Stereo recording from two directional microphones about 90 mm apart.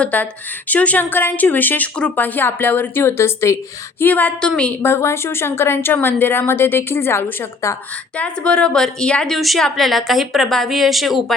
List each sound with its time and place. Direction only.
0.0 s speech: 20° left (ahead or behind)
4.0 s a woman's voice: 20° left (ahead or behind)
4.8 s speech: 30° left (ahead or behind)
8.4 s a woman's voice: 10° left (ahead or behind)